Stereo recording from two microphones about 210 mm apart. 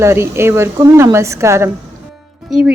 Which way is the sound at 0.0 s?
10° right (ahead or behind).